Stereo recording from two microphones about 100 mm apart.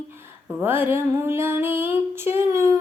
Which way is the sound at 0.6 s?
20° right (ahead or behind).